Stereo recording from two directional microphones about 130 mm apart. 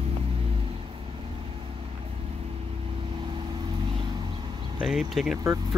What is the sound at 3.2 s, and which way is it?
Vehicle, 40° right (ahead or behind).